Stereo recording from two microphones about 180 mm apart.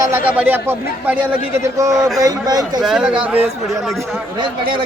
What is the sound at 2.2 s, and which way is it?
Speech, 20° right (ahead or behind).